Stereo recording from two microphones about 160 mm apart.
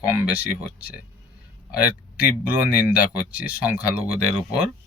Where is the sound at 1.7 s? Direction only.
10° right (ahead or behind).